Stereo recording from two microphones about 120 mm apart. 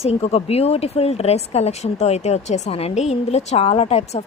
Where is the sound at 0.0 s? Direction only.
60° left (ahead or behind).